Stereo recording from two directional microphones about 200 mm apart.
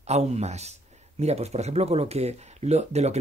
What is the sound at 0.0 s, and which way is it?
Speech, 35° right (ahead or behind).